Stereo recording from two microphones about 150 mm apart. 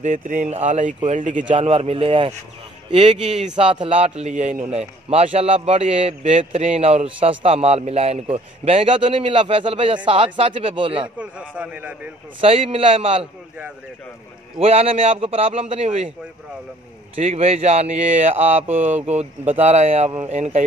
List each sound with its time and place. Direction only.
0.0 s speech: 60° right (ahead or behind)
1.5 s a man's voice: 40° right (ahead or behind)
11.1 s a man's voice: 5° right (ahead or behind)
12.4 s a man's voice: 40° right (ahead or behind)
14.6 s a man's voice: 40° right (ahead or behind)
17.1 s speech: 45° right (ahead or behind)